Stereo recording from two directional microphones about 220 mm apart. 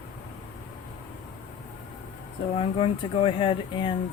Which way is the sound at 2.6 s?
25° left (ahead or behind).